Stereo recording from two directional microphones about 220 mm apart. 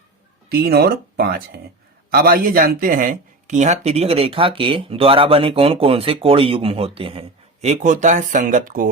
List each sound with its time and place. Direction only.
0.5 s speech: 45° right (ahead or behind)